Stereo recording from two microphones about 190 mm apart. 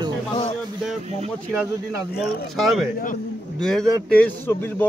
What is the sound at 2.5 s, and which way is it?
Speech, centre (ahead or behind).